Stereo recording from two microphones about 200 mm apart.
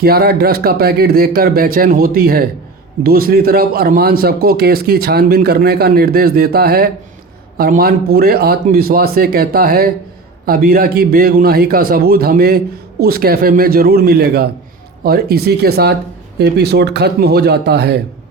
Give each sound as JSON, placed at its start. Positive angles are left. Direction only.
{"t": 0.0, "sound": "a man's voice", "side_deg": -50}